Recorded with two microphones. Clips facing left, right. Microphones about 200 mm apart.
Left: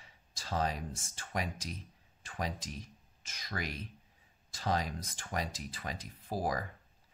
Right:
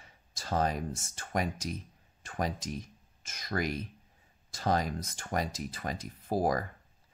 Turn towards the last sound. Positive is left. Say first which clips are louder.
# right 6 dB
turn(degrees=-45)  # may be behind; listen again after turning